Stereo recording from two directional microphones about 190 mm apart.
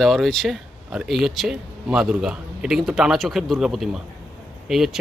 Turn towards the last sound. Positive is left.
turn(degrees=0)  # may be behind; listen again after turning